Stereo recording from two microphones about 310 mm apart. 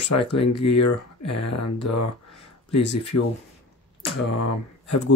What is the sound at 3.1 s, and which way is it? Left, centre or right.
Speech, left.